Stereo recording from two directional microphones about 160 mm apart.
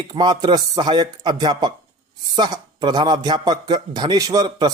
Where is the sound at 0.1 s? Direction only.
25° right (ahead or behind).